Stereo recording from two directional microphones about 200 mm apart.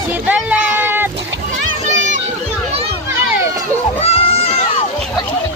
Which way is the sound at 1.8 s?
40° right (ahead or behind).